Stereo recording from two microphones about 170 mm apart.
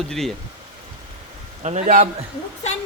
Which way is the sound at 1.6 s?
45° right (ahead or behind).